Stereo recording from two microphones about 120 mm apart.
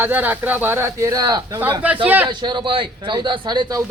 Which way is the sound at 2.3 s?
40° right (ahead or behind).